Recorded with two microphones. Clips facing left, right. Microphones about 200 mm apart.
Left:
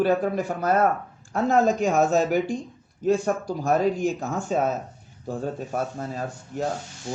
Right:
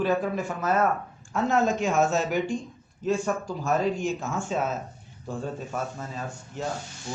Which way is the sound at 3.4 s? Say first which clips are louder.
Left 3 dB; 35° left (ahead or behind).